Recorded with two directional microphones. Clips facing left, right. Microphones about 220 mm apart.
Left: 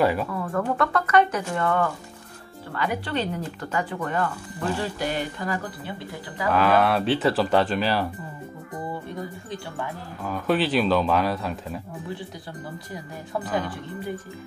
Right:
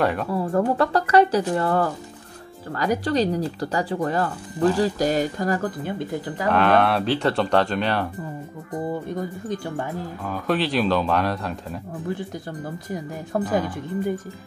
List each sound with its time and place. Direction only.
0.0 s speech: centre (ahead or behind)
0.3 s speech: 30° right (ahead or behind); by 6.4 s 45° right (ahead or behind)
6.5 s speech: centre (ahead or behind)
9.1 s speech: 45° right (ahead or behind)
10.2 s speech: centre (ahead or behind)